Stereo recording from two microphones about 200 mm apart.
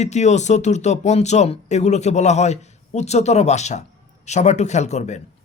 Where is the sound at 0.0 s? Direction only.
35° left (ahead or behind).